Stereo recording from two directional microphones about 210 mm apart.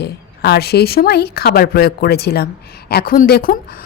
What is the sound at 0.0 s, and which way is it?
Speech, 50° left (ahead or behind).